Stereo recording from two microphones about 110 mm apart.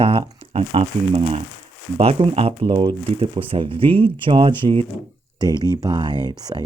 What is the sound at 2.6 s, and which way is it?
Speech, 40° right (ahead or behind).